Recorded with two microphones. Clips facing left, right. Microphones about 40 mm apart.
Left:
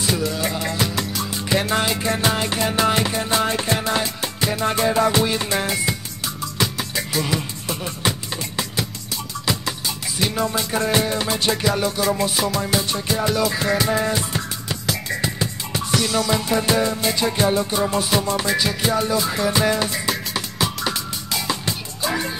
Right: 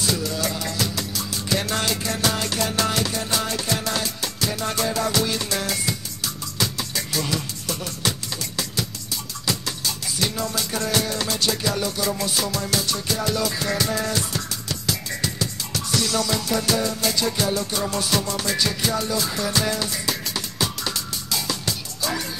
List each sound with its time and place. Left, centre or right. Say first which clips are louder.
0.0 s music: left 2 dB; left
9.5 s music: left 2 dB; left
20.1 s music: left 3 dB; centre